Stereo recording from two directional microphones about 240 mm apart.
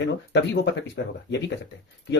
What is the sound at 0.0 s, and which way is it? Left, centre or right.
Speech, left.